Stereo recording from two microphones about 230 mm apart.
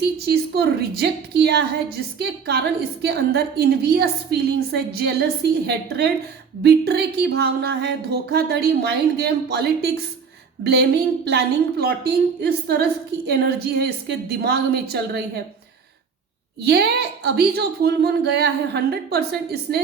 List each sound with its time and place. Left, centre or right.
0.2 s speech: right
16.6 s speech: right